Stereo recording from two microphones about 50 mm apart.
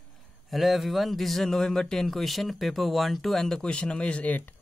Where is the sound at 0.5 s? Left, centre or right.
Centre.